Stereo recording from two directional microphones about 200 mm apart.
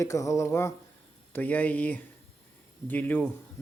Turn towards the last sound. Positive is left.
turn(degrees=10)  # may be behind; listen again after turning